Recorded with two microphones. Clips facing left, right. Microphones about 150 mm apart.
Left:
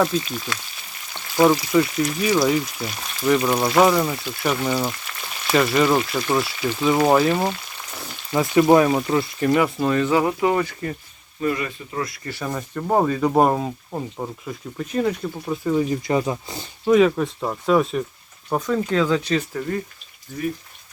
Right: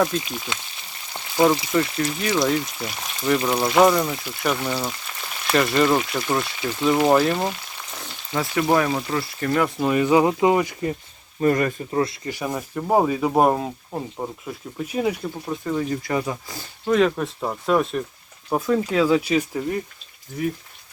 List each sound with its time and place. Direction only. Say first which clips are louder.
0.3 s speech: left 2 dB; 15° right (ahead or behind)
1.7 s speech: left 3 dB; centre (ahead or behind)
7.9 s a sound: left 4 dB; 5° left (ahead or behind)
8.4 s speech: left 5 dB; 20° left (ahead or behind)
9.5 s speech: left 1 dB; centre (ahead or behind)
9.9 s speech: right 5 dB; 15° right (ahead or behind)
11.3 s speech: right 4 dB; 45° right (ahead or behind); by 12.3 s 25° right (ahead or behind)
12.3 s speech: right 1 dB; 10° right (ahead or behind)
15.6 s speech: left 4 dB; 15° left (ahead or behind)
16.8 s speech: left 3 dB; 5° left (ahead or behind); by 19.8 s 15° right (ahead or behind)